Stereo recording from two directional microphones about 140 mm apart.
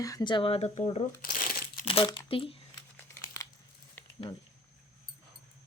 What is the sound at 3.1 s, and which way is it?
Crumpling, 20° left (ahead or behind).